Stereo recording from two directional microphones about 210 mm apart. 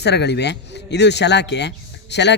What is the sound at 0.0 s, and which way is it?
Speech, 50° left (ahead or behind).